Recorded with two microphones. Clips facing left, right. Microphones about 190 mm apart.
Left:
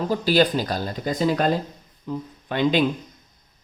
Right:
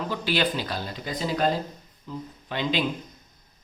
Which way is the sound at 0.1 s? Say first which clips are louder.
Left 8 dB; 40° left (ahead or behind).